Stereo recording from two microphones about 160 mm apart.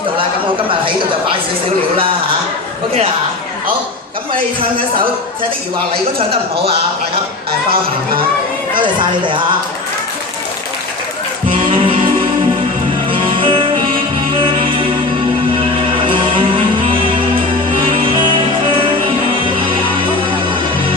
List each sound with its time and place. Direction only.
0.7 s speech: 30° right (ahead or behind)
4.4 s speech: 30° right (ahead or behind)
8.7 s speech: 30° right (ahead or behind)
11.4 s music: 35° right (ahead or behind)
13.1 s music: 35° right (ahead or behind)
16.0 s music: 30° right (ahead or behind)